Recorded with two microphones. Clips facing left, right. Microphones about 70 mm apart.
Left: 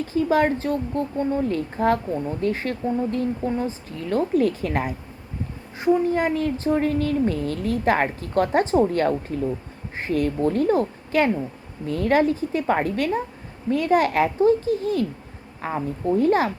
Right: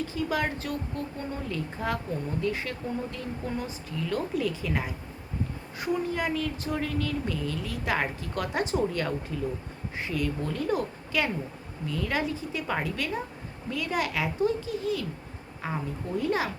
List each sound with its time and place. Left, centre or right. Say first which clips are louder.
0.1 s speech: left 9 dB; left
5.8 s a woman's voice: left 9 dB; left